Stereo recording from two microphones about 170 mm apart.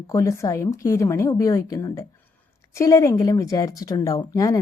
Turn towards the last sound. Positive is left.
turn(degrees=20)  # may be behind; listen again after turning